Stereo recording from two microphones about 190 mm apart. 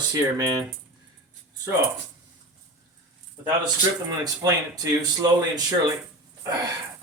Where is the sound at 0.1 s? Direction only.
20° right (ahead or behind).